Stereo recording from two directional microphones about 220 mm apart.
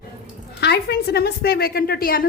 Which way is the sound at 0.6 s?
45° left (ahead or behind).